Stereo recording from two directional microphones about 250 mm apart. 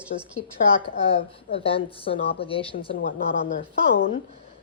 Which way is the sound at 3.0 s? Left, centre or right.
Left.